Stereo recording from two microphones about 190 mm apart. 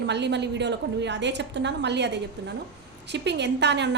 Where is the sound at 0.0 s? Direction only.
65° right (ahead or behind).